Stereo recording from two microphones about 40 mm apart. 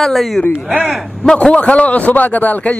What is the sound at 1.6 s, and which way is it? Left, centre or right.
Speech, left.